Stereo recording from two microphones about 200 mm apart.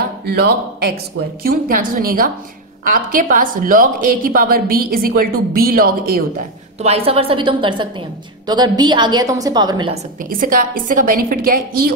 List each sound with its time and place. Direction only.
0.3 s a woman's voice: 50° right (ahead or behind)
6.8 s a woman's voice: 30° right (ahead or behind)
10.3 s a woman's voice: 45° right (ahead or behind)